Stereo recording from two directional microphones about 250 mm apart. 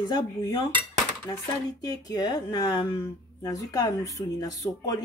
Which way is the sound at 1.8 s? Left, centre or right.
Centre.